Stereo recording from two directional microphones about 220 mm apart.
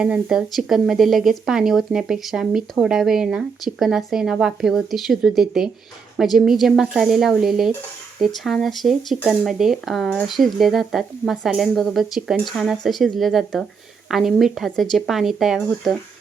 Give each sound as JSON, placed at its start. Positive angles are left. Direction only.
{"t": 0.0, "sound": "speech", "side_deg": -5}